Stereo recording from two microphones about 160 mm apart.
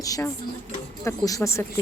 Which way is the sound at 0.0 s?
20° left (ahead or behind).